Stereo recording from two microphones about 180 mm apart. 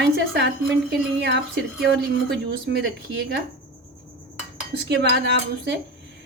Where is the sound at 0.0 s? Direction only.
70° right (ahead or behind).